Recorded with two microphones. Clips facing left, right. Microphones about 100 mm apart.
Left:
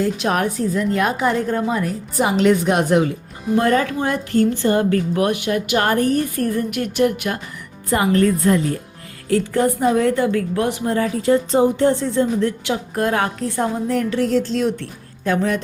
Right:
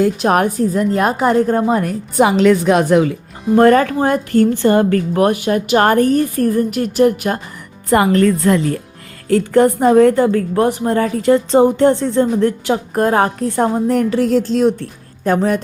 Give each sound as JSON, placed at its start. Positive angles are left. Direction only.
{"t": 0.2, "sound": "a woman's voice", "side_deg": -50}
{"t": 3.5, "sound": "a woman's voice", "side_deg": -55}
{"t": 6.7, "sound": "a sound", "side_deg": -35}
{"t": 7.9, "sound": "a woman's voice", "side_deg": -60}
{"t": 9.3, "sound": "a woman's voice", "side_deg": -55}
{"t": 13.6, "sound": "a woman's voice", "side_deg": -50}